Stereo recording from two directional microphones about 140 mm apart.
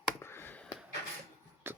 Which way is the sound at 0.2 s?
15° left (ahead or behind).